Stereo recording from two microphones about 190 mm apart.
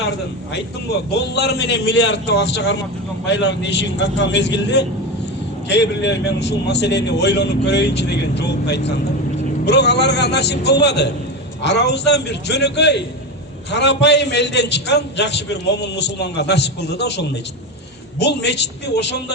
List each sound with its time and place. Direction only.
1.1 s a man's voice: 60° left (ahead or behind)